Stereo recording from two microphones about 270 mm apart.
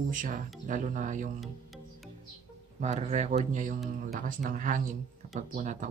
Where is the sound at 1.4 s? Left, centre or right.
Centre.